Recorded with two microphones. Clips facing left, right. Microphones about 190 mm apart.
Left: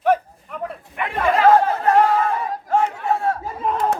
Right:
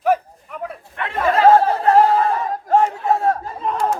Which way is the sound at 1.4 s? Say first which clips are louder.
Right 2 dB; 35° right (ahead or behind).